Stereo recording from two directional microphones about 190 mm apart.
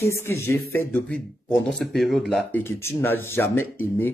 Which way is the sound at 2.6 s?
15° left (ahead or behind).